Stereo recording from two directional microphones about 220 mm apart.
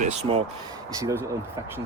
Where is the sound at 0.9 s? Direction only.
15° right (ahead or behind).